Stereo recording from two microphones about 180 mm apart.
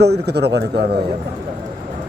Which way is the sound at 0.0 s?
65° right (ahead or behind).